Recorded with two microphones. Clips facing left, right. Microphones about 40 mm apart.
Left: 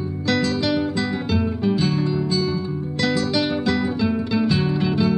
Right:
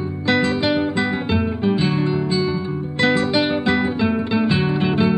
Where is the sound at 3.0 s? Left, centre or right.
Right.